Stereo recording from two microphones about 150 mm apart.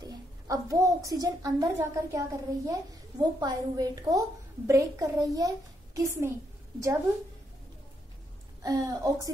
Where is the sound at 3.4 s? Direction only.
25° right (ahead or behind).